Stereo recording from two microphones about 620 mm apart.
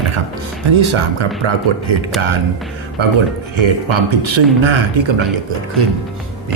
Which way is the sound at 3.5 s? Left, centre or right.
Right.